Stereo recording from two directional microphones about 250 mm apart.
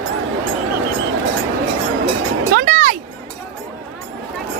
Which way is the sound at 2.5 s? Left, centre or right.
Right.